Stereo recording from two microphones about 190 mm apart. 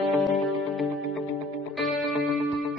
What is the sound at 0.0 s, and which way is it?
Music, centre (ahead or behind).